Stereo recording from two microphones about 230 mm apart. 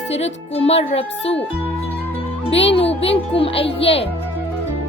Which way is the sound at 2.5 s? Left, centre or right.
Left.